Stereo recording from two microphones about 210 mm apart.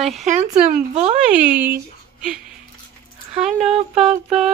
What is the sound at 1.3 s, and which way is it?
Speech, 5° right (ahead or behind).